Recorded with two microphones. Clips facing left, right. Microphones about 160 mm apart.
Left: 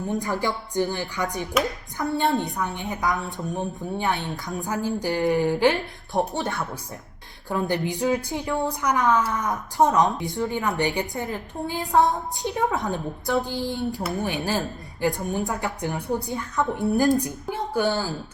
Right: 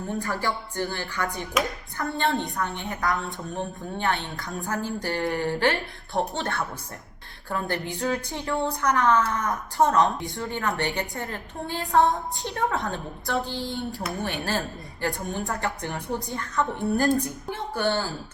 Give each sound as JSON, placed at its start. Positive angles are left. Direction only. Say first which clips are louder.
{"t": 0.1, "sound": "a woman's voice", "louder": "left 2 dB", "side_deg": 20}